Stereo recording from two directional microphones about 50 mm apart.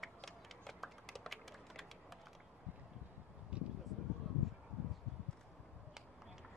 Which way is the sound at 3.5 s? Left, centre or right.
Right.